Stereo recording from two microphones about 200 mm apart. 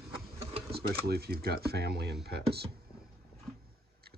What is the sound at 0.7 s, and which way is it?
Speech, 50° right (ahead or behind).